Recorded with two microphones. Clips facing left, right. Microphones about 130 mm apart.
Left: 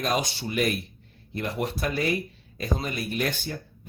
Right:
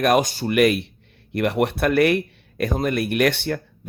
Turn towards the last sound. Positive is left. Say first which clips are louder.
# right 9 dB
turn(degrees=-75)  # may be behind; listen again after turning